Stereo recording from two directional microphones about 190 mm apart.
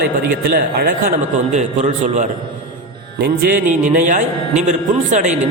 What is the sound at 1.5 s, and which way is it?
A man's voice, 40° right (ahead or behind).